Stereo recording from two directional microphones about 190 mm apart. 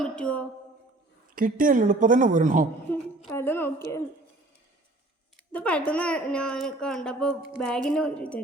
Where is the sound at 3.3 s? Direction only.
10° left (ahead or behind).